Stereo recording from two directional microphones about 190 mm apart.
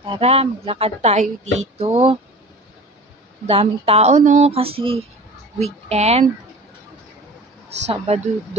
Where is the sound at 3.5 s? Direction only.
30° right (ahead or behind).